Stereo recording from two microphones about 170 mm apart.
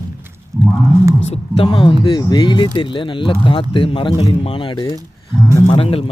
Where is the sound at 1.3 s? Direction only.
35° left (ahead or behind).